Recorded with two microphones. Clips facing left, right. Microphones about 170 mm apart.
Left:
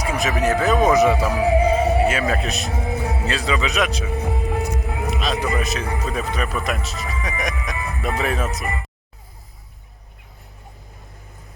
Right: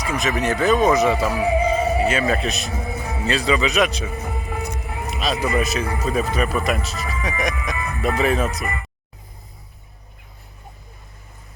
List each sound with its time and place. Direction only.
0.0 s a sound: 5° left (ahead or behind)
0.6 s speech: 5° left (ahead or behind)
1.5 s music: 70° left (ahead or behind)
2.0 s speech: 5° left (ahead or behind)
2.7 s music: 65° left (ahead or behind)
3.2 s speech: centre (ahead or behind)
4.1 s music: 65° left (ahead or behind); by 5.1 s 90° left
5.1 s speech: 5° right (ahead or behind)
7.8 s music: 20° left (ahead or behind)
8.2 s speech: centre (ahead or behind)